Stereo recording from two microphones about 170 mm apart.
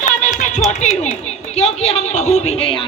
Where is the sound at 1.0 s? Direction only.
40° left (ahead or behind).